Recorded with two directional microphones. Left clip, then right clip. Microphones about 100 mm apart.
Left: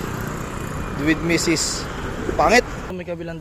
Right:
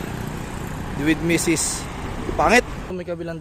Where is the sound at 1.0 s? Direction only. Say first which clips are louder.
Left 1 dB; 30° right (ahead or behind).